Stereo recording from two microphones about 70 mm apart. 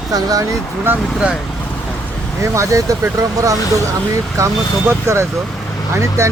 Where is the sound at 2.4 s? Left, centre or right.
Right.